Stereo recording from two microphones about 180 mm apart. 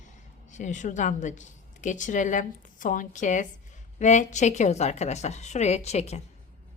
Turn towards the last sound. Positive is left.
turn(degrees=35)  # may be behind; listen again after turning